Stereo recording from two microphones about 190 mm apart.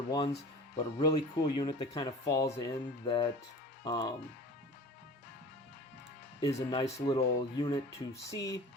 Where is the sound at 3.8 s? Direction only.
20° left (ahead or behind).